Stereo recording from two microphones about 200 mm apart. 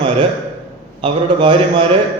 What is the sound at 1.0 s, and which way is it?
Speech, 25° right (ahead or behind).